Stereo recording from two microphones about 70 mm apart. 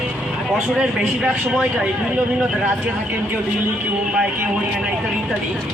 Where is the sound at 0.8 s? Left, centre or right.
Centre.